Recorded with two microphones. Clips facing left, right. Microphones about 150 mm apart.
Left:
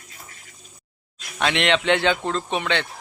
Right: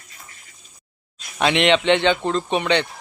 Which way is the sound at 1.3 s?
Centre (ahead or behind).